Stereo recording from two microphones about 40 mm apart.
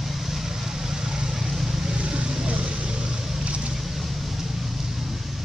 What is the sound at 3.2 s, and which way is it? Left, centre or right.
Vehicle, centre.